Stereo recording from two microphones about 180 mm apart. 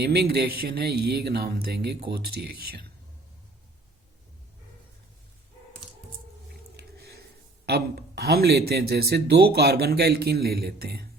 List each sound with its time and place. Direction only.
0.0 s a man's voice: 60° right (ahead or behind)
7.6 s a man's voice: 60° right (ahead or behind)